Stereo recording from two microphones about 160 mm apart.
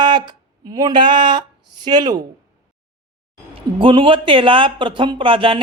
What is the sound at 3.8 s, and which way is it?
Speech, 30° right (ahead or behind).